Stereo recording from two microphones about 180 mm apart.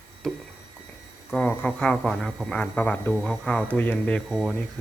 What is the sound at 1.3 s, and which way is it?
Speech, 5° left (ahead or behind).